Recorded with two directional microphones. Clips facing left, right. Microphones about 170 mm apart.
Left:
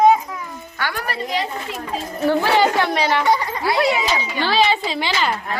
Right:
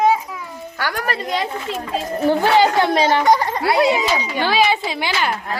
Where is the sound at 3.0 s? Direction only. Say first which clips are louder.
Right 3 dB; 40° right (ahead or behind).